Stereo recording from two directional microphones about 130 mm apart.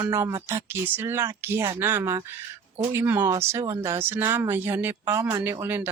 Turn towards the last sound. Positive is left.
turn(degrees=-15)  # may be behind; listen again after turning